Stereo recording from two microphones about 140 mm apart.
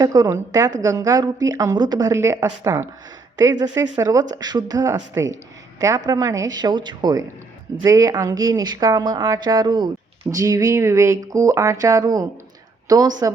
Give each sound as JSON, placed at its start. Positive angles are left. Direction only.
{"t": 0.0, "sound": "a woman's voice", "side_deg": -25}